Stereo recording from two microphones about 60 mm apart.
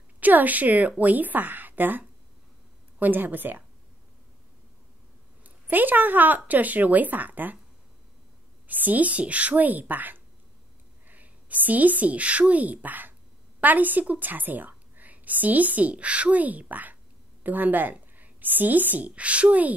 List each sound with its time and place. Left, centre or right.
0.2 s speech: right
5.4 s speech: right
8.6 s a woman's voice: right